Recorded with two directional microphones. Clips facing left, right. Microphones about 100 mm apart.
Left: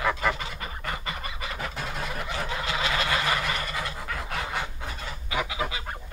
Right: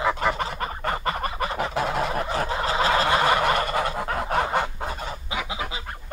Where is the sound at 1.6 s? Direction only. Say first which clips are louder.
Right 10 dB; 70° right (ahead or behind).